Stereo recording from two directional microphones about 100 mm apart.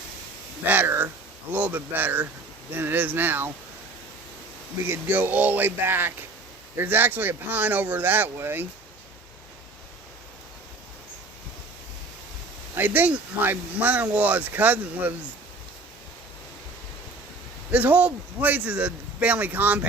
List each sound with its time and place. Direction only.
0.6 s speech: 20° right (ahead or behind)
4.9 s speech: 20° right (ahead or behind)
12.7 s speech: 20° right (ahead or behind)
17.7 s speech: 15° right (ahead or behind)